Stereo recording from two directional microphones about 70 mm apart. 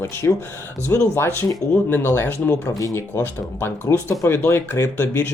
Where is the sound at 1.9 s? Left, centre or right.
Left.